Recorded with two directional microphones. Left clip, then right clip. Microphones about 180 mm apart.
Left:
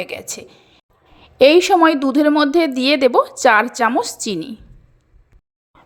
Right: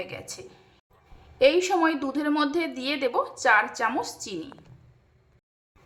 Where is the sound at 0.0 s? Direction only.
40° left (ahead or behind).